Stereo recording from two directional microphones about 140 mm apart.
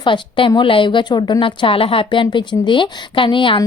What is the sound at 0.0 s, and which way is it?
A woman's voice, 35° left (ahead or behind).